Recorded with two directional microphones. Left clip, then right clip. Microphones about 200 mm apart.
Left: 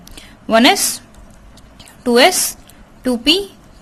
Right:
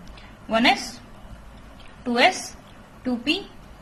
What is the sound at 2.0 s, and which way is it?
Speech, 45° left (ahead or behind).